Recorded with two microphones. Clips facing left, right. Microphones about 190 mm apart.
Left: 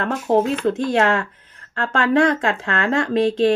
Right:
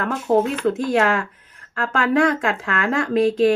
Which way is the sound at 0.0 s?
25° left (ahead or behind).